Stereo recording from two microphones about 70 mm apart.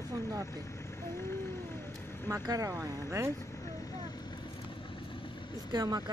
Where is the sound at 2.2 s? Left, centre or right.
Right.